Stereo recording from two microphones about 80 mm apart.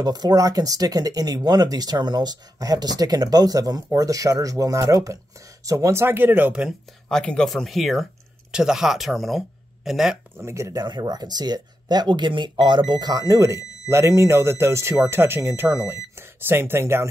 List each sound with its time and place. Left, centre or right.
0.0 s speech: right
7.1 s speech: centre
10.3 s speech: right
10.8 s speech: right
13.1 s speech: right